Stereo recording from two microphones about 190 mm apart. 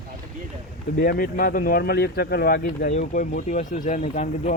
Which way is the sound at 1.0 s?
50° left (ahead or behind).